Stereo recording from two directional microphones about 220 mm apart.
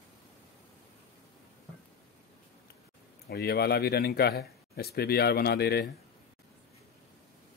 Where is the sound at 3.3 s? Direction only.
45° left (ahead or behind).